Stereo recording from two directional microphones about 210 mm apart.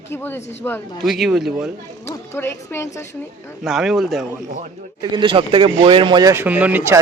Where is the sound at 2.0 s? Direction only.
10° left (ahead or behind).